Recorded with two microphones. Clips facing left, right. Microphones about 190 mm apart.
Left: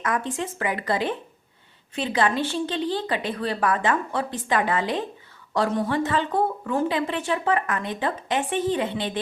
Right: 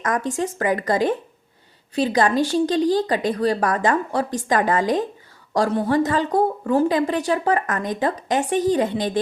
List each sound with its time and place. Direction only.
0.0 s a woman's voice: 40° right (ahead or behind)